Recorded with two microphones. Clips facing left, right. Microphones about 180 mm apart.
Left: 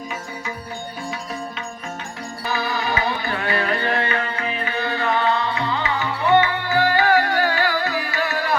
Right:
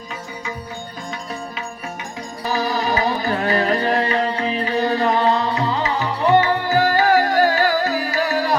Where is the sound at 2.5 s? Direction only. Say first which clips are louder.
Right 4 dB; 40° right (ahead or behind).